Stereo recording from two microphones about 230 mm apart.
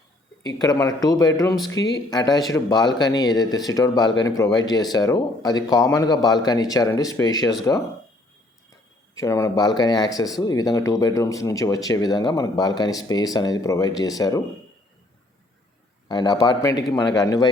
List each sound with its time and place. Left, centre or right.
0.4 s speech: centre
9.1 s speech: centre
16.0 s speech: centre